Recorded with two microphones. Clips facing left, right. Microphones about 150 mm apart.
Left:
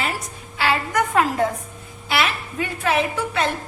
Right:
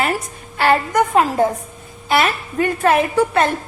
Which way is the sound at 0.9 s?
25° right (ahead or behind).